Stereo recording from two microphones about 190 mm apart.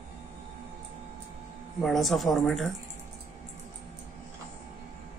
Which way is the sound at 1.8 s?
Centre (ahead or behind).